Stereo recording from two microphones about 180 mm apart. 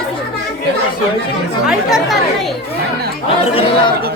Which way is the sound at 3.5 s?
30° left (ahead or behind).